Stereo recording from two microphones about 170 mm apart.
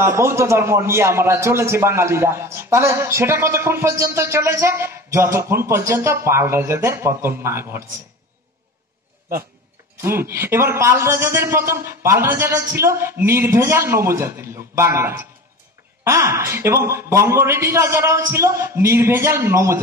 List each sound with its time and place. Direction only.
0.0 s a man's voice: 15° right (ahead or behind)
10.0 s a man's voice: 15° right (ahead or behind)